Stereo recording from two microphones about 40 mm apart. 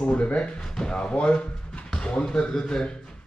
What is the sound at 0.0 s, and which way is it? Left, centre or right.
Speech, left.